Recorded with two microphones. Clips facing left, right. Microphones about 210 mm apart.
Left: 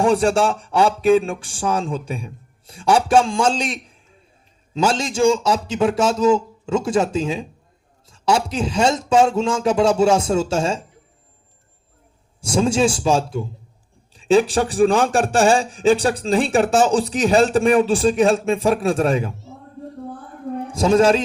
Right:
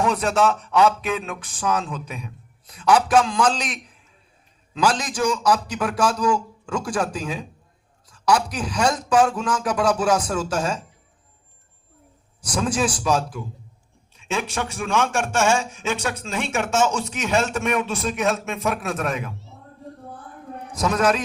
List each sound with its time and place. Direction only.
0.0 s speech: 30° left (ahead or behind)
12.4 s a man's voice: 25° left (ahead or behind)
20.7 s speech: 30° left (ahead or behind)